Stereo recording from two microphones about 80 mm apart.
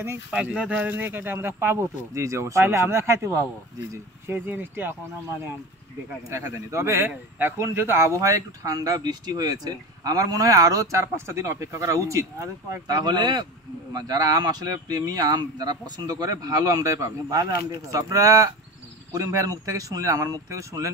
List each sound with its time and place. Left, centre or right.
0.3 s speech: centre; by 3.4 s right
4.3 s speech: right
6.3 s speech: right